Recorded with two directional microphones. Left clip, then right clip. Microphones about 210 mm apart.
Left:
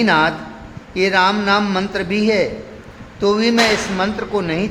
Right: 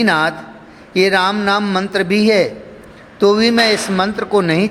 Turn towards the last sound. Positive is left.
turn(degrees=-25)  # may be behind; listen again after turning